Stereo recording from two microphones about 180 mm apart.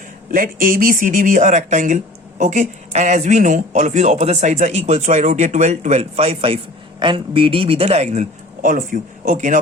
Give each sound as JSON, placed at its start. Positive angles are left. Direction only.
{"t": 0.3, "sound": "speech", "side_deg": -50}